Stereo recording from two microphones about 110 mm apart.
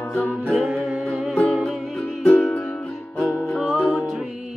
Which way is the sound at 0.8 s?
5° right (ahead or behind).